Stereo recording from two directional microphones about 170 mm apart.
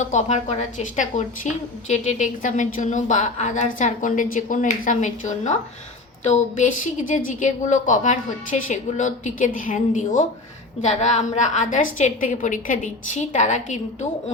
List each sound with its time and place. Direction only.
0.0 s a woman's voice: 45° left (ahead or behind)